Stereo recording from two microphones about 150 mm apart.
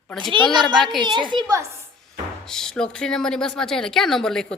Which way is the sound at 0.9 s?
30° right (ahead or behind).